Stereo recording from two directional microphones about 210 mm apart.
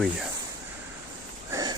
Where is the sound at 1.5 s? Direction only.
20° right (ahead or behind).